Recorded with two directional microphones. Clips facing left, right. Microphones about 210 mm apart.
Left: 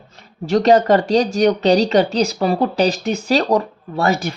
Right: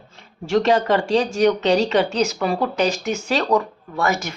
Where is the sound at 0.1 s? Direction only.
40° left (ahead or behind).